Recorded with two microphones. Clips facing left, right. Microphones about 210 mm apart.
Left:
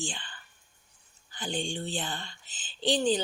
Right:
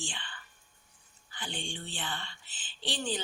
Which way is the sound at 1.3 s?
40° left (ahead or behind).